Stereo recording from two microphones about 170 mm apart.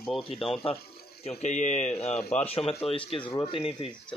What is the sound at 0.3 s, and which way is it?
Speech, 40° left (ahead or behind).